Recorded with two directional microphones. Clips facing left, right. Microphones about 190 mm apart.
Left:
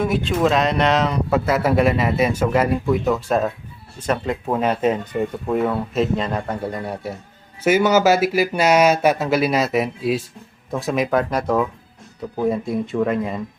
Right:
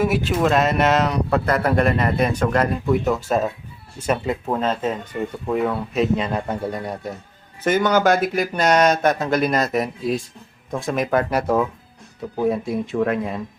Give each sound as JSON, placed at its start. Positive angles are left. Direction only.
{"t": 0.0, "sound": "speech", "side_deg": -5}
{"t": 4.6, "sound": "speech", "side_deg": 15}
{"t": 5.5, "sound": "speech", "side_deg": 0}